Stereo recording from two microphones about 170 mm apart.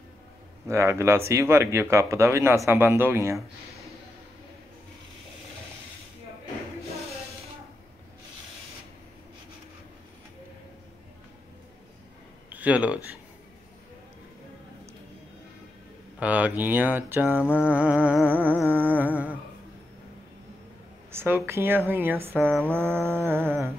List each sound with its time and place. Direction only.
0.7 s speech: 15° right (ahead or behind)
3.3 s speech: centre (ahead or behind)
12.4 s speech: 10° right (ahead or behind)
16.2 s speech: 10° right (ahead or behind)
21.1 s a sound: 15° right (ahead or behind)
21.5 s speech: 15° right (ahead or behind)